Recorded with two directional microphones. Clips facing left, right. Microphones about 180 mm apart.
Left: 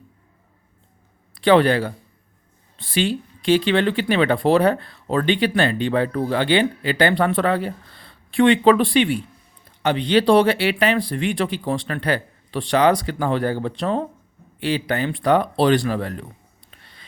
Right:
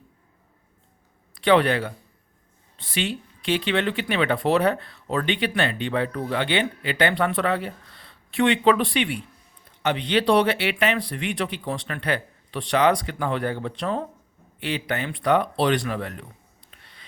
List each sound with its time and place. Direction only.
1.5 s speech: 35° left (ahead or behind)
2.9 s speech: 35° left (ahead or behind)